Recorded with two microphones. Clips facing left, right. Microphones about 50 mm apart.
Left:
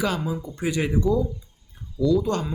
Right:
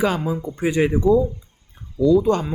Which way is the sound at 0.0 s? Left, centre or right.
Right.